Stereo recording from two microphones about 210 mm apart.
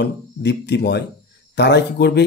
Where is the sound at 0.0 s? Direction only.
55° left (ahead or behind).